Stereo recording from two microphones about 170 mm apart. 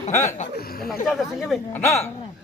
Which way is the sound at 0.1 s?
15° left (ahead or behind).